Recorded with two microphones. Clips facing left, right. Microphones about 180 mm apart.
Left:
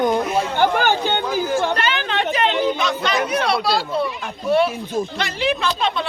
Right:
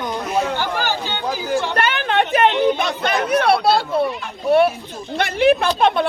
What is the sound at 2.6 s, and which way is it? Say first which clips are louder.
Speech: right 2 dB; 60° right (ahead or behind).